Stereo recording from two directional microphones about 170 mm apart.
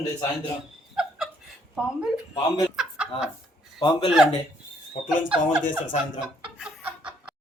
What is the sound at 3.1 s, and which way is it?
Speech, 35° left (ahead or behind).